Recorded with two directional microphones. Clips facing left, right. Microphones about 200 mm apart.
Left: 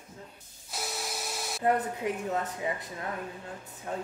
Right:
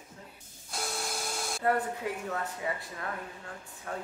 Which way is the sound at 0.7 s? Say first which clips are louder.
Right 1 dB; 5° left (ahead or behind).